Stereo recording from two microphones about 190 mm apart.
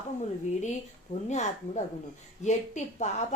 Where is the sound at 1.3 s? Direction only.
35° left (ahead or behind).